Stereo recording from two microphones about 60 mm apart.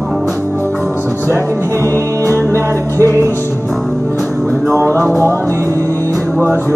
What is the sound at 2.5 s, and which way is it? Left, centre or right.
Music, right.